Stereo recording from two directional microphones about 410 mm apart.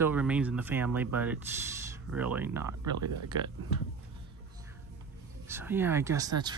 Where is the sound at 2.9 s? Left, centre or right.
Right.